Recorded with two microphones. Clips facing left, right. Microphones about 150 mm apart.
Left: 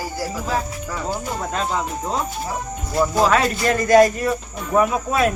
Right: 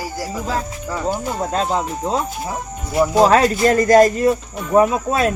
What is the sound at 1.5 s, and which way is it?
Speech, 35° right (ahead or behind).